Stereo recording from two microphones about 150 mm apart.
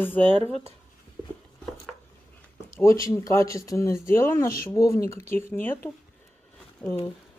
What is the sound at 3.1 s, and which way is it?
Speech, 20° left (ahead or behind).